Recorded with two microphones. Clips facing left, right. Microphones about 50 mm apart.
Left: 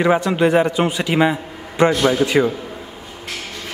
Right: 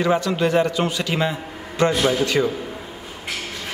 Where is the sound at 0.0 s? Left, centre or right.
Left.